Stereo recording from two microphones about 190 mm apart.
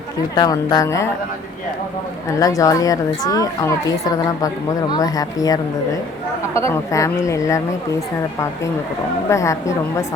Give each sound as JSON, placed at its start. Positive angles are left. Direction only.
{"t": 0.3, "sound": "a woman's voice", "side_deg": 20}
{"t": 2.4, "sound": "a woman's voice", "side_deg": 20}
{"t": 9.3, "sound": "a woman's voice", "side_deg": 15}